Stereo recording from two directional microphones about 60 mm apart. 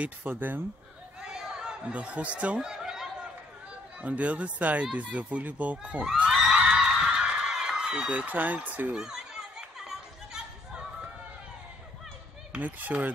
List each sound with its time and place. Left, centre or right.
0.0 s speech: right
1.2 s a sound: centre
4.0 s speech: right
6.2 s a sound: centre; by 8.9 s right
8.9 s chatter: centre
12.5 s speech: right